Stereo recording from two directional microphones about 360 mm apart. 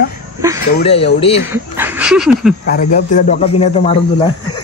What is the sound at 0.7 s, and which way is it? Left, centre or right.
Speech, centre.